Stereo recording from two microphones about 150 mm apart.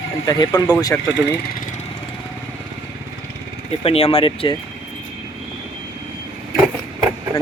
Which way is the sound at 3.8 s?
40° left (ahead or behind).